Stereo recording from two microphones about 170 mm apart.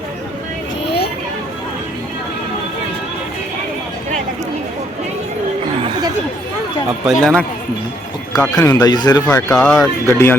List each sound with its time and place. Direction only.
0.9 s a sound: 75° left (ahead or behind)
7.0 s speech: centre (ahead or behind)
8.5 s speech: 20° left (ahead or behind)
9.5 s speech: 5° left (ahead or behind)
10.1 s speech: 15° left (ahead or behind)